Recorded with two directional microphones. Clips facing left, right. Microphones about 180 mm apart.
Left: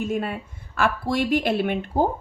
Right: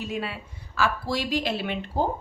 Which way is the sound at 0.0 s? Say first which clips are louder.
Left 5 dB; 50° left (ahead or behind).